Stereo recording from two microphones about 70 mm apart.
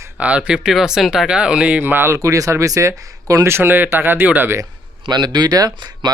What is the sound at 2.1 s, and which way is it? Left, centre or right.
Speech, right.